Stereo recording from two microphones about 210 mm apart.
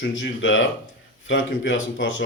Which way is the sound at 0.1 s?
65° left (ahead or behind).